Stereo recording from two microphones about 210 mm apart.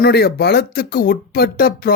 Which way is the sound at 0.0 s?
50° left (ahead or behind).